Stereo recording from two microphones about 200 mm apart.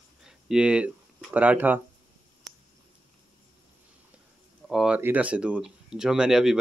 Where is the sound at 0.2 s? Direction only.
Centre (ahead or behind).